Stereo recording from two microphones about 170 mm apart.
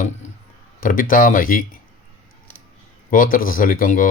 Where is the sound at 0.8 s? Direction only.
50° left (ahead or behind).